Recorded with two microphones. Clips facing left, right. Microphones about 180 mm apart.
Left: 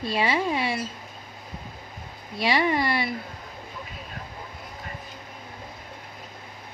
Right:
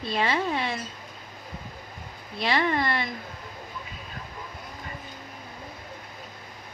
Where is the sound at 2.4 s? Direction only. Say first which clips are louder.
Left 2 dB; 10° left (ahead or behind).